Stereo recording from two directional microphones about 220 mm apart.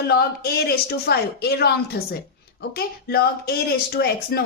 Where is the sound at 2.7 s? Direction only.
45° left (ahead or behind).